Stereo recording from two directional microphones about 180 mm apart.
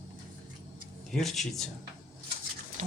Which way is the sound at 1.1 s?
Centre (ahead or behind).